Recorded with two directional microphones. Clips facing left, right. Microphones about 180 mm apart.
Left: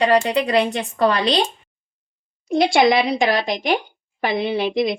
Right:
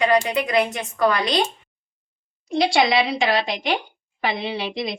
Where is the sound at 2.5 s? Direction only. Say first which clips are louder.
Left 3 dB; 50° left (ahead or behind).